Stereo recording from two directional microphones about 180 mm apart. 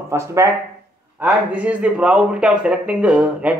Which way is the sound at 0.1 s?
15° right (ahead or behind).